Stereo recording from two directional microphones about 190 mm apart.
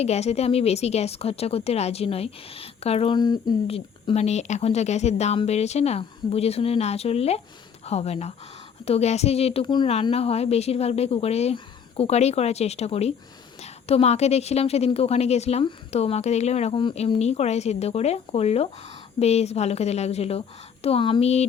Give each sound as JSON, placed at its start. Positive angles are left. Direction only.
{"t": 0.0, "sound": "speech", "side_deg": 35}